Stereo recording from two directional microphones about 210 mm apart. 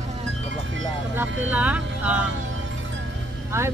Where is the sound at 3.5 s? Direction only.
10° right (ahead or behind).